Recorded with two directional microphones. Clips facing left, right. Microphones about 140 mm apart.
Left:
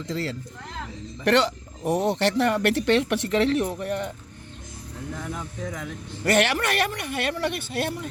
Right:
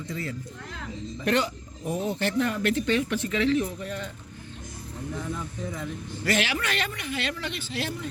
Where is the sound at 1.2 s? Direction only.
70° left (ahead or behind).